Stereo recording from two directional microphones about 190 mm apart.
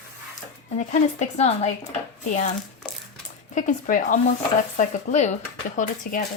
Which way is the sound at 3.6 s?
40° left (ahead or behind).